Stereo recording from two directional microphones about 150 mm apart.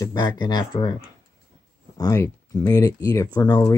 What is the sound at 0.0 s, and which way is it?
Speech, 25° left (ahead or behind).